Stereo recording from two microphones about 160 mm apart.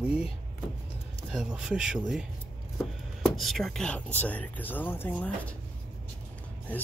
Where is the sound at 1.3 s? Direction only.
Centre (ahead or behind).